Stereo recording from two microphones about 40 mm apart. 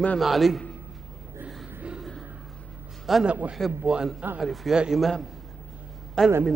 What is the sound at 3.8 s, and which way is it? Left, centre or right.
Speech, centre.